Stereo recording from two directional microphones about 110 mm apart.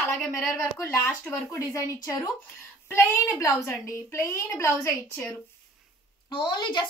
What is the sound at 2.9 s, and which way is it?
Speech, 20° left (ahead or behind).